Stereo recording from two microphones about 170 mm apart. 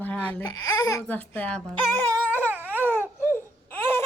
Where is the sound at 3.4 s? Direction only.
10° left (ahead or behind).